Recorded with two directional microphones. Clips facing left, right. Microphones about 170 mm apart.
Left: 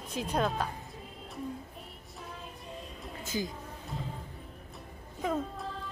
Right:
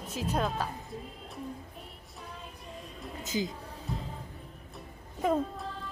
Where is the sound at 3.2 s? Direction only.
20° right (ahead or behind).